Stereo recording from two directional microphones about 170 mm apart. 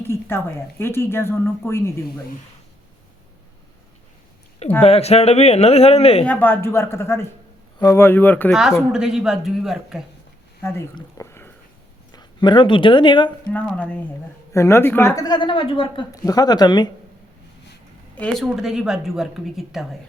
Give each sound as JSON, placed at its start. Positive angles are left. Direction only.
{"t": 0.0, "sound": "speech", "side_deg": 15}
{"t": 4.8, "sound": "speech", "side_deg": 35}
{"t": 6.2, "sound": "speech", "side_deg": 10}
{"t": 8.9, "sound": "speech", "side_deg": -5}
{"t": 10.6, "sound": "speech", "side_deg": 15}
{"t": 10.9, "sound": "a sound", "side_deg": 15}
{"t": 12.1, "sound": "speech", "side_deg": 25}
{"t": 13.5, "sound": "a woman's voice", "side_deg": 10}
{"t": 16.1, "sound": "a woman's voice", "side_deg": 20}
{"t": 18.1, "sound": "speech", "side_deg": 5}